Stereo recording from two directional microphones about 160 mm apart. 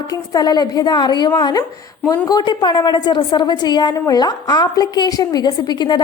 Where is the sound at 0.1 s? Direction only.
25° left (ahead or behind).